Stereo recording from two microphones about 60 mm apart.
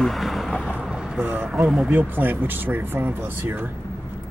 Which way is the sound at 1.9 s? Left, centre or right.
Right.